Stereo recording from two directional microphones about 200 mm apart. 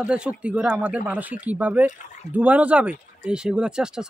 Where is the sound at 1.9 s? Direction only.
35° left (ahead or behind).